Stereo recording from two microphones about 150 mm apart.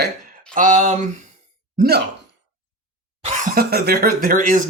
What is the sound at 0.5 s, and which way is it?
Speech, 60° right (ahead or behind).